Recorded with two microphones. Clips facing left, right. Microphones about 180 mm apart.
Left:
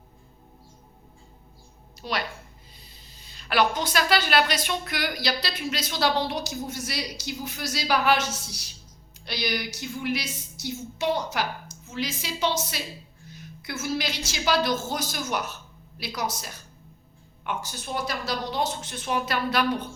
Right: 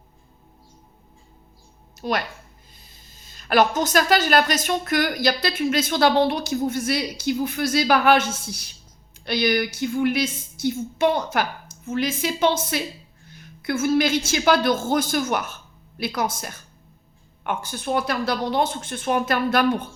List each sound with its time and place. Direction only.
2.0 s a woman's voice: 50° right (ahead or behind)